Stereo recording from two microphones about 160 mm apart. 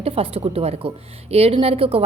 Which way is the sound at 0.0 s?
35° right (ahead or behind).